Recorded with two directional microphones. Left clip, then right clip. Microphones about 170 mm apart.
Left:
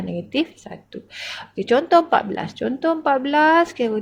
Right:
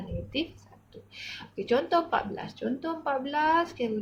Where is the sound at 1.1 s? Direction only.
55° left (ahead or behind).